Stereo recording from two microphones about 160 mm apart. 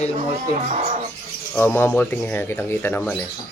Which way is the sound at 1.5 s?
10° left (ahead or behind).